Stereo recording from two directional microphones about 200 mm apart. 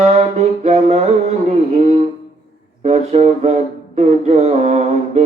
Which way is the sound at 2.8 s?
35° right (ahead or behind).